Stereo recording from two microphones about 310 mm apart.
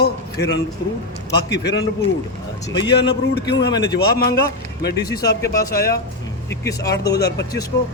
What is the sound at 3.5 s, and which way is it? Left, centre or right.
Speech, centre.